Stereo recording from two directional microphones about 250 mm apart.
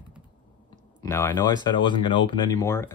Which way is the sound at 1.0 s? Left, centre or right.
Centre.